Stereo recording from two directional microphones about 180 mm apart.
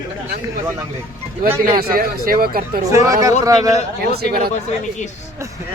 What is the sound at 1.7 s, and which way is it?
Speech, 55° right (ahead or behind).